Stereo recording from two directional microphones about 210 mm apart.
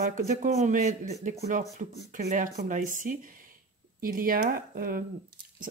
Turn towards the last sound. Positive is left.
turn(degrees=-45)  # may be behind; listen again after turning